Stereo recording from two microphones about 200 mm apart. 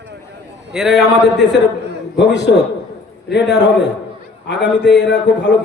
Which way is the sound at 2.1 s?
60° left (ahead or behind).